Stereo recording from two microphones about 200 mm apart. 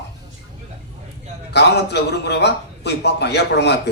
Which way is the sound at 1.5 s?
55° left (ahead or behind).